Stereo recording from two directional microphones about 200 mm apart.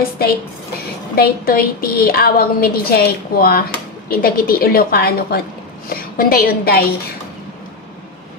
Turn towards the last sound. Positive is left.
turn(degrees=50)  # may be behind; listen again after turning